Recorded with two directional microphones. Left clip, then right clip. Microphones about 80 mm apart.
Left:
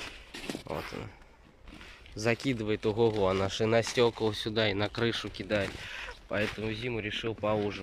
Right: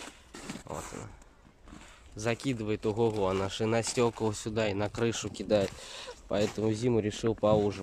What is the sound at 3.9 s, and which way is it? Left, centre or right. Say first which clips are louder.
Speech: left 2 dB; right.